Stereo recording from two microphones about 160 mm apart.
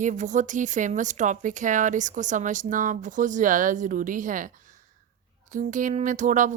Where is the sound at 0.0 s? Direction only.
50° right (ahead or behind).